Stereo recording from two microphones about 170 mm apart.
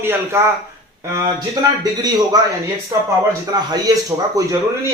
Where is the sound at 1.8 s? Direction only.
25° right (ahead or behind).